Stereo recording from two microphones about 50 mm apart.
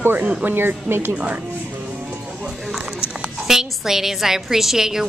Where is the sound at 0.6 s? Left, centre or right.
Right.